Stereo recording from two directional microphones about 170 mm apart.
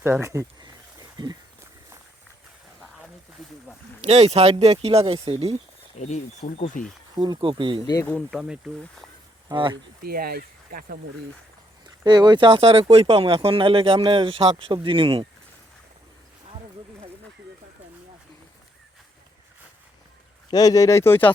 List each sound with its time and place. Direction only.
0.0 s a sound: 15° right (ahead or behind)
4.0 s speech: 40° right (ahead or behind)
6.0 s speech: 45° left (ahead or behind)
7.2 s speech: 25° right (ahead or behind)
7.9 s speech: 15° left (ahead or behind)
8.3 s speech: 5° right (ahead or behind)
9.5 s speech: 30° right (ahead or behind)
10.1 s speech: 60° right (ahead or behind)
12.0 s speech: 25° right (ahead or behind)
20.5 s speech: 20° left (ahead or behind)